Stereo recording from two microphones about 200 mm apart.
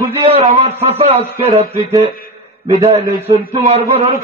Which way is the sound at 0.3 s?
30° right (ahead or behind).